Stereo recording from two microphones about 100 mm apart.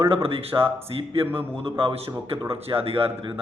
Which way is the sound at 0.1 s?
70° right (ahead or behind).